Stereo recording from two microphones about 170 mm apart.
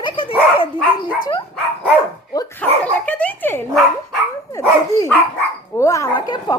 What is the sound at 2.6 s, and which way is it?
A woman's voice, 10° left (ahead or behind).